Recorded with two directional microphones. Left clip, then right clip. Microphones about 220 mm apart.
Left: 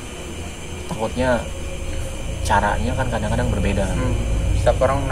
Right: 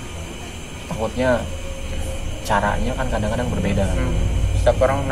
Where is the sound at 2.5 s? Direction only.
15° left (ahead or behind).